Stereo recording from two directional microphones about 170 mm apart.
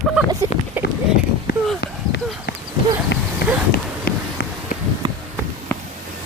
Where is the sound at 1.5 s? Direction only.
75° left (ahead or behind).